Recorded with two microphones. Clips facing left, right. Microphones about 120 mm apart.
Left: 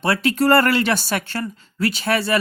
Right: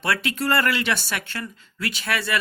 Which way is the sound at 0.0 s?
35° left (ahead or behind).